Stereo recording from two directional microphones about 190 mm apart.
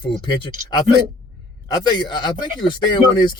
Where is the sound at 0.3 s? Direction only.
25° left (ahead or behind).